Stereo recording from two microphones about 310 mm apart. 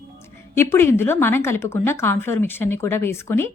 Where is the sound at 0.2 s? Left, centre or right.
Centre.